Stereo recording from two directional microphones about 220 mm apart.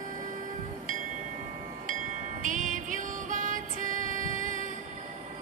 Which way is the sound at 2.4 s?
35° right (ahead or behind).